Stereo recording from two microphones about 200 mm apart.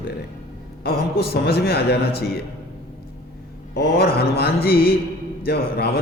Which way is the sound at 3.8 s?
50° left (ahead or behind).